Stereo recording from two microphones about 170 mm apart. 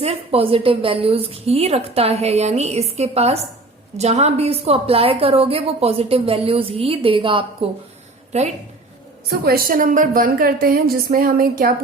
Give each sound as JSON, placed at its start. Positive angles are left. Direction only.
{"t": 0.0, "sound": "a woman's voice", "side_deg": -35}
{"t": 9.2, "sound": "a woman's voice", "side_deg": -65}